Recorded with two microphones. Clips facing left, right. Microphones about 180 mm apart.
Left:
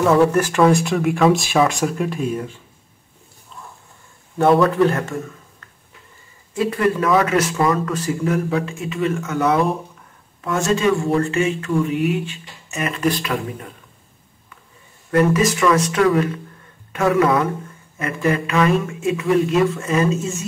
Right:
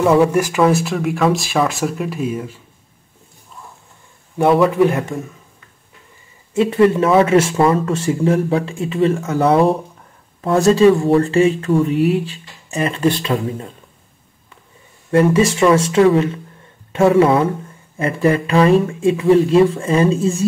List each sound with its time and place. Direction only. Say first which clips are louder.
0.0 s speech: right 2 dB; 10° right (ahead or behind)
4.5 s speech: right 2 dB; 10° right (ahead or behind)
6.5 s speech: right 6 dB; 25° right (ahead or behind)
15.0 s speech: right 3 dB; 25° right (ahead or behind)